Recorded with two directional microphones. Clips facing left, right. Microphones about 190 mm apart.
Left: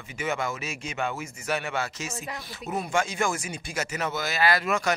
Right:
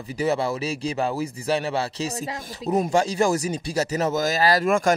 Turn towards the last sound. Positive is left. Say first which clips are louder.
# right 5 dB
turn(degrees=-45)  # may be behind; listen again after turning